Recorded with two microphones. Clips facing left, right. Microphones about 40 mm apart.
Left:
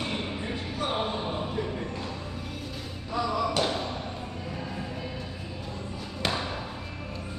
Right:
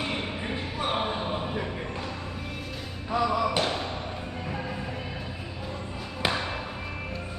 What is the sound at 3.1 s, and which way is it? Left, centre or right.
Basketball bounce, centre.